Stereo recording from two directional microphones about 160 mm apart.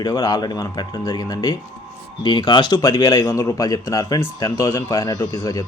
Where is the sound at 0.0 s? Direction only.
25° left (ahead or behind).